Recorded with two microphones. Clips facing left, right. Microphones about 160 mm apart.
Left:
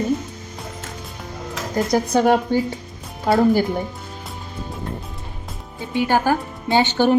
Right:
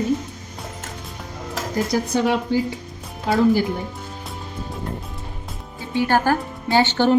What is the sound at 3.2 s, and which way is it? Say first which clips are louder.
Speech: left 1 dB; 45° left (ahead or behind).